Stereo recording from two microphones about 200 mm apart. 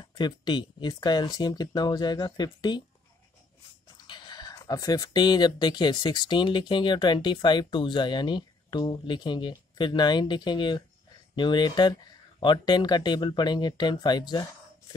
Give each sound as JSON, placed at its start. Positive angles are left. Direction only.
{"t": 0.0, "sound": "speech", "side_deg": 20}
{"t": 4.1, "sound": "speech", "side_deg": 20}